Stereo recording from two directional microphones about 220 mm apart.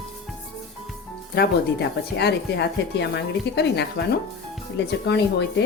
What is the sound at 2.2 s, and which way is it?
Speech, 50° left (ahead or behind).